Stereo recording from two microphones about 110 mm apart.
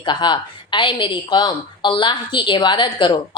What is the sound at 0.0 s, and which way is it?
A woman's voice, 45° left (ahead or behind).